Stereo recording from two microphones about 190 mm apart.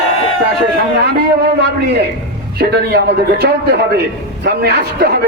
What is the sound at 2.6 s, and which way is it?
A man's voice, 55° right (ahead or behind).